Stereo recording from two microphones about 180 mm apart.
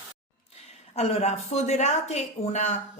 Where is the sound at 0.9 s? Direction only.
35° left (ahead or behind).